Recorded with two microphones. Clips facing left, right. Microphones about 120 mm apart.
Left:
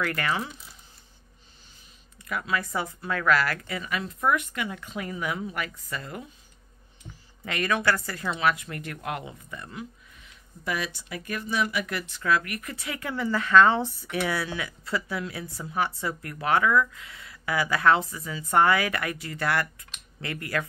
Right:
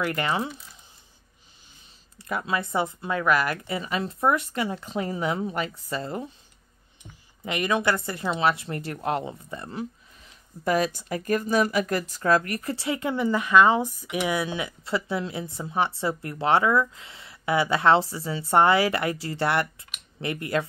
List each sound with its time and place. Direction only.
0.0 s speech: 20° right (ahead or behind)
2.1 s speech: 30° right (ahead or behind)
7.4 s speech: 20° right (ahead or behind)